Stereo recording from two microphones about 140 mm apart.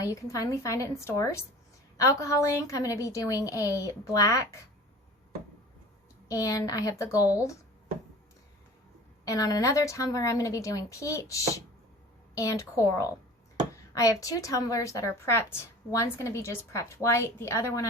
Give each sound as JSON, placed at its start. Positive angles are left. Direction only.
{"t": 0.0, "sound": "a woman's voice", "side_deg": 25}
{"t": 6.2, "sound": "a woman's voice", "side_deg": 25}
{"t": 9.2, "sound": "a woman's voice", "side_deg": 25}